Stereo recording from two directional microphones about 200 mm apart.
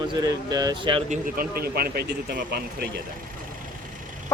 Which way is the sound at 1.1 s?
45° right (ahead or behind).